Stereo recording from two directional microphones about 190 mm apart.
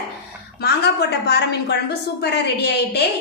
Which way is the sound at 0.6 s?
60° left (ahead or behind).